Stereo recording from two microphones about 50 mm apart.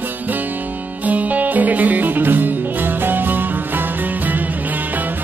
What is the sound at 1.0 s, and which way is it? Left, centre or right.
Music, right.